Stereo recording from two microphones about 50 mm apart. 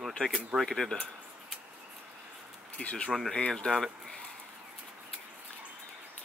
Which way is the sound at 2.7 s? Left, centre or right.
Left.